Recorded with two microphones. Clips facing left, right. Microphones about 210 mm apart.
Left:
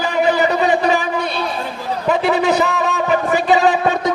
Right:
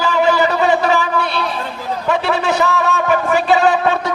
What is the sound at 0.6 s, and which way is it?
Speech, 35° left (ahead or behind).